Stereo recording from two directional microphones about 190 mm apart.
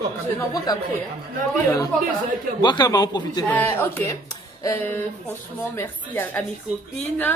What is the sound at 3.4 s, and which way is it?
A woman's voice, 10° left (ahead or behind).